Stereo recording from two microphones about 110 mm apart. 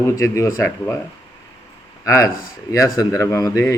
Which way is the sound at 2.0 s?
30° left (ahead or behind).